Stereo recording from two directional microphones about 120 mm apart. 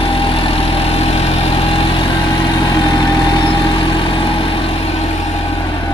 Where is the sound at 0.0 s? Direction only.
50° left (ahead or behind).